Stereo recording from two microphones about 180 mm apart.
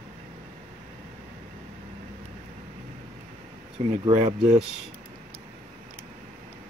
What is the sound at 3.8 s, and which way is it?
Speech, 30° right (ahead or behind).